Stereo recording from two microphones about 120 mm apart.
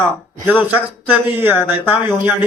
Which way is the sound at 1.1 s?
15° right (ahead or behind).